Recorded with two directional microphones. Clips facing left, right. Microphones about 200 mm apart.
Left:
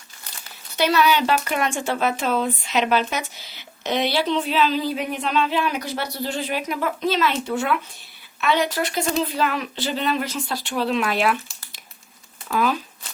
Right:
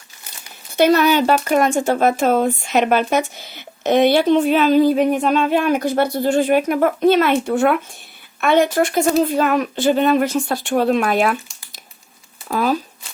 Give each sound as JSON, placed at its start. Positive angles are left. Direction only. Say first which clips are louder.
{"t": 0.8, "sound": "speech", "louder": "right 6 dB", "side_deg": -50}
{"t": 12.5, "sound": "speech", "louder": "right 3 dB", "side_deg": -40}